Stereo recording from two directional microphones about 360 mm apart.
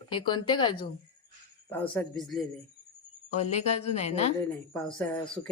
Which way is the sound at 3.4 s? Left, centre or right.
Centre.